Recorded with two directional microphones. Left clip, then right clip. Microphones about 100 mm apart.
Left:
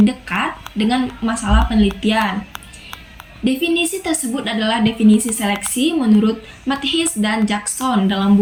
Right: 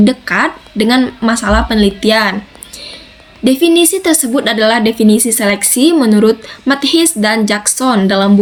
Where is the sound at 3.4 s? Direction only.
40° right (ahead or behind).